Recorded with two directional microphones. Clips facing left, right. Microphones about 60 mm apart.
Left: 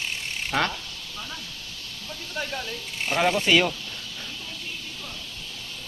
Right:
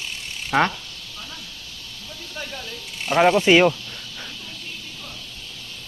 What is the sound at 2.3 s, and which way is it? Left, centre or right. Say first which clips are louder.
Speech: left 3 dB; centre.